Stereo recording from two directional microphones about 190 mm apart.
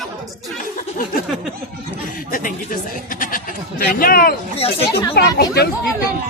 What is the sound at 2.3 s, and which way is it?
Speech, 45° left (ahead or behind).